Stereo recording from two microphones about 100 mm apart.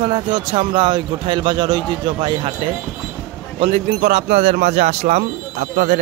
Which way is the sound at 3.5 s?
80° right.